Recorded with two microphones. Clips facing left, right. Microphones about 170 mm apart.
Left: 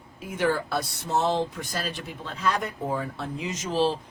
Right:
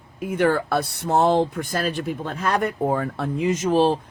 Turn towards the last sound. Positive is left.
turn(degrees=-55)  # may be behind; listen again after turning